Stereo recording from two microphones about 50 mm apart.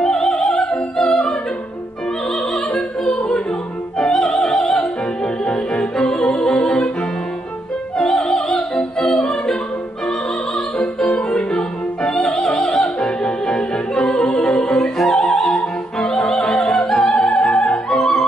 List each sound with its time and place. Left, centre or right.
0.0 s opera: centre
2.5 s opera: centre
5.2 s music: centre
8.0 s opera: centre
11.0 s music: centre
12.0 s opera: centre
17.6 s music: centre